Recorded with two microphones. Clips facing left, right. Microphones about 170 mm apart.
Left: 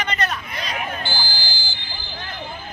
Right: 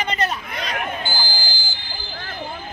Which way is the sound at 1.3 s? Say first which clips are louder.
Right 1 dB; 45° right (ahead or behind).